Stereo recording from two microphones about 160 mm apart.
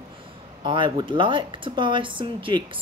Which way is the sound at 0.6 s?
30° right (ahead or behind).